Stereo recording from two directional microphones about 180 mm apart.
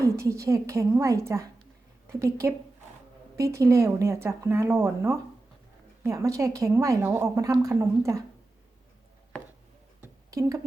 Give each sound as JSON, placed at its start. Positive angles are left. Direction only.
{"t": 0.2, "sound": "speech", "side_deg": -15}
{"t": 9.3, "sound": "chopping", "side_deg": 5}
{"t": 10.0, "sound": "a sound", "side_deg": -15}